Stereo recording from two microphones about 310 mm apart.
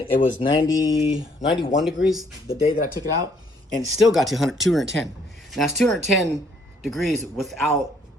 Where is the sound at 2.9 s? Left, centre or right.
Centre.